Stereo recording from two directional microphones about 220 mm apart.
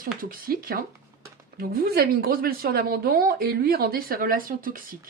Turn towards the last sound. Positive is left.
turn(degrees=-40)  # may be behind; listen again after turning